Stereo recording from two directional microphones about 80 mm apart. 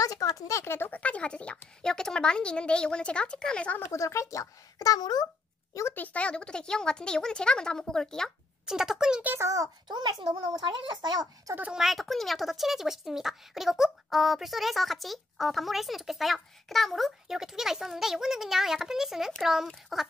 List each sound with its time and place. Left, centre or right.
0.0 s speech: left
0.7 s a woman's voice: left
3.8 s speech: left
5.9 s a woman's voice: centre
8.6 s speech: centre
9.4 s a child's voice: right
9.8 s a child's voice: right
11.7 s speech: centre